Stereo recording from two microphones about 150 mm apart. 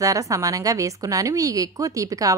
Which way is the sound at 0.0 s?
20° right (ahead or behind).